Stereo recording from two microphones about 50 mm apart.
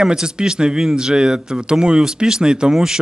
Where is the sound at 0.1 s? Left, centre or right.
Centre.